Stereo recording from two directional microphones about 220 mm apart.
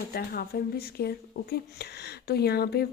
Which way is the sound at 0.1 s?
45° left (ahead or behind).